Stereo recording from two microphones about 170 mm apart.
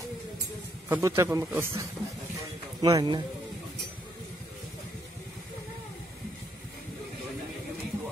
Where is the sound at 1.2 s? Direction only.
15° right (ahead or behind).